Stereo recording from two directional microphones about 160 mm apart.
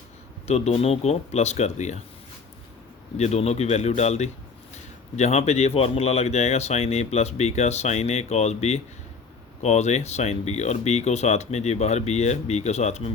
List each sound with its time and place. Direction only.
0.4 s speech: 45° left (ahead or behind)
3.2 s speech: 45° left (ahead or behind)